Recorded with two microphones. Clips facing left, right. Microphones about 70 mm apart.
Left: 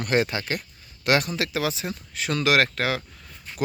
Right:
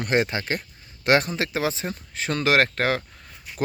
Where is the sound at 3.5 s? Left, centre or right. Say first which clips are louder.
Right 1 dB; centre.